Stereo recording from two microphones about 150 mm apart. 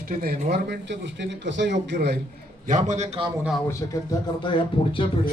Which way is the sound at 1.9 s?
90° right.